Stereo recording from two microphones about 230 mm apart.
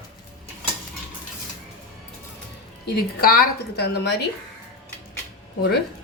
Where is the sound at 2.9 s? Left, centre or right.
Left.